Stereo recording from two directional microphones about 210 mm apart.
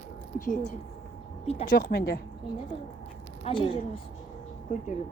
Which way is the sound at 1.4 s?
40° left (ahead or behind).